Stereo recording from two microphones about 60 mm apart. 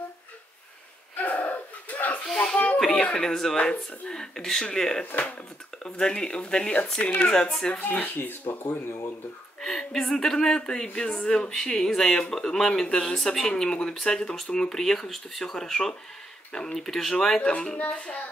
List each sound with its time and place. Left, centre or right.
1.1 s a sound: left
3.0 s speech: centre
8.2 s speech: left
9.6 s speech: centre
17.4 s speech: centre